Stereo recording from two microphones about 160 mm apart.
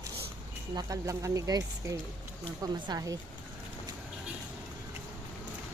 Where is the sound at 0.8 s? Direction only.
20° right (ahead or behind).